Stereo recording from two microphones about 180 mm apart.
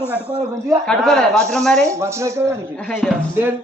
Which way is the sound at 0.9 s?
5° left (ahead or behind).